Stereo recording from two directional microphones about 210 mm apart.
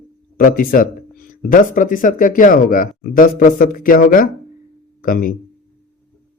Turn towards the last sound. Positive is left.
turn(degrees=40)  # may be behind; listen again after turning